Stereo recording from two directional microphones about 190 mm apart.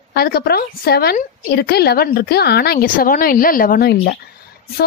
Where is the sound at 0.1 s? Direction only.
55° left (ahead or behind).